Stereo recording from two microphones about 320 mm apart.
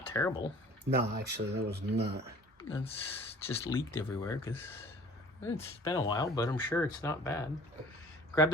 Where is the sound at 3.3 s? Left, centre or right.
Centre.